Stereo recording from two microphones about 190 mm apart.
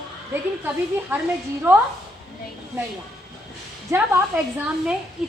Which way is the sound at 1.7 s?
10° right (ahead or behind).